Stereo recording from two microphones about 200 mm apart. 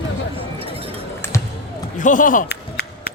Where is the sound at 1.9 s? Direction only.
40° left (ahead or behind).